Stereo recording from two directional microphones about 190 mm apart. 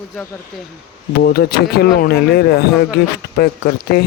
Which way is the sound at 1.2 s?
55° left (ahead or behind).